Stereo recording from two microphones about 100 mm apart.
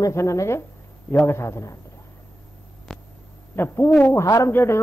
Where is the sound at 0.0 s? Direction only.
30° left (ahead or behind).